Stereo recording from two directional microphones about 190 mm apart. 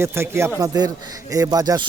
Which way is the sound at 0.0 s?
15° right (ahead or behind).